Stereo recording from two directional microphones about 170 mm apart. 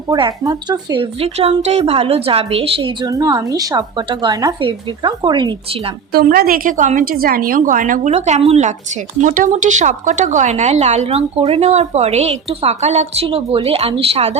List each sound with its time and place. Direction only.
0.1 s a woman's voice: 25° right (ahead or behind)
6.1 s a woman's voice: 65° right (ahead or behind); by 8.7 s 40° right (ahead or behind)
9.2 s a woman's voice: 50° right (ahead or behind)